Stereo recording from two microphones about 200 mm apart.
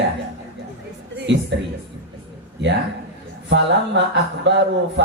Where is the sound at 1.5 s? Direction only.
60° right (ahead or behind).